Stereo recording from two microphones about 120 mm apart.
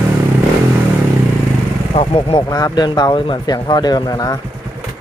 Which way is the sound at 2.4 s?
35° left (ahead or behind).